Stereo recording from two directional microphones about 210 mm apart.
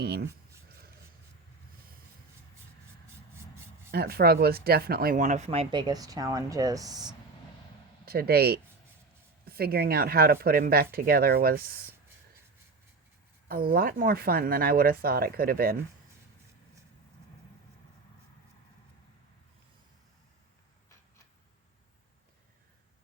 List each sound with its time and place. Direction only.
0.0 s speech: 50° right (ahead or behind)
3.9 s speech: 50° right (ahead or behind); by 7.1 s 20° right (ahead or behind)
8.0 s speech: 45° right (ahead or behind)
13.5 s speech: 45° right (ahead or behind)